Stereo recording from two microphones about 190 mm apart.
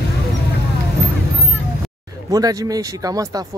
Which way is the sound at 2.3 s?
20° right (ahead or behind).